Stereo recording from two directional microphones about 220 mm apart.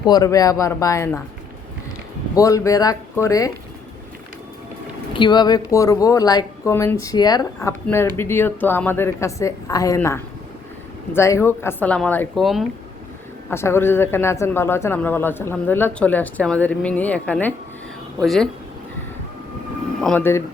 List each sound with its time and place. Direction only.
0.1 s speech: 15° left (ahead or behind)
2.3 s speech: 15° left (ahead or behind)
5.1 s speech: 20° left (ahead or behind); by 12.6 s centre (ahead or behind)
13.5 s speech: 10° left (ahead or behind)
20.0 s speech: 5° left (ahead or behind)